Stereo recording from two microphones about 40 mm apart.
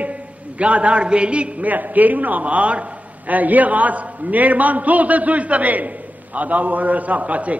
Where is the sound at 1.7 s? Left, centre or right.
Right.